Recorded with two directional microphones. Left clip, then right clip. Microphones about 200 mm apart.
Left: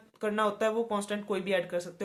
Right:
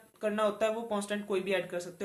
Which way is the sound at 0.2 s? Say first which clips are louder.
Left 1 dB; 30° left (ahead or behind).